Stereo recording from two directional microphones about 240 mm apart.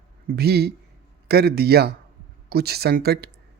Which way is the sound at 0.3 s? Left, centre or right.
Right.